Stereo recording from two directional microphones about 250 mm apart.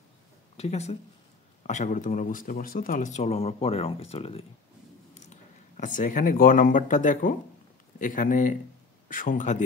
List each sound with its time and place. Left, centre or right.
0.6 s speech: left